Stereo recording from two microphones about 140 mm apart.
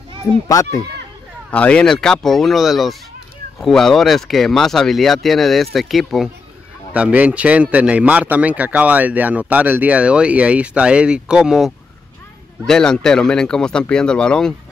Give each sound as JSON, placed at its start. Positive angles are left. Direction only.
{"t": 0.5, "sound": "speech", "side_deg": 25}
{"t": 1.5, "sound": "a man's voice", "side_deg": 10}